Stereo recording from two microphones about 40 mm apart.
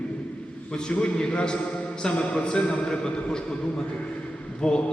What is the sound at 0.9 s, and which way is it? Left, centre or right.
A man's voice, left.